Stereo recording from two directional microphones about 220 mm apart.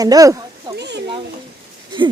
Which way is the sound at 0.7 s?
50° right (ahead or behind).